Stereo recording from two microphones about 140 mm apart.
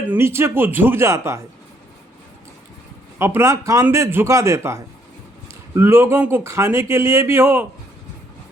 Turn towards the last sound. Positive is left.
turn(degrees=-15)  # may be behind; listen again after turning